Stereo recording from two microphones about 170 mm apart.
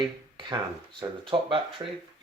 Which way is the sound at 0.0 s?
30° right (ahead or behind).